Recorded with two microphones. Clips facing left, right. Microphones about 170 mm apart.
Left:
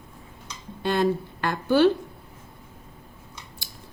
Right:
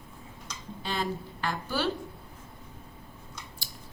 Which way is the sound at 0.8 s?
60° left (ahead or behind).